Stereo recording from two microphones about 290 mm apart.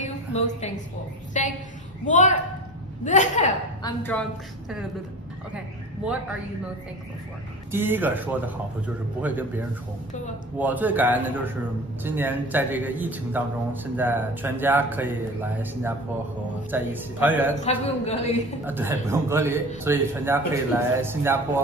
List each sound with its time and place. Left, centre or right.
1.3 s a sound: left
2.0 s a man's voice: left
3.8 s speech: centre
7.7 s a man's voice: centre
17.6 s a man's voice: left
18.7 s a man's voice: centre